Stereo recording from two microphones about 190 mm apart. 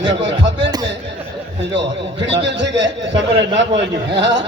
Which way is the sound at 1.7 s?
70° right (ahead or behind).